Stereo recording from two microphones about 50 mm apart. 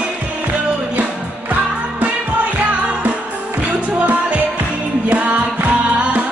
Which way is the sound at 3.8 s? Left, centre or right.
Right.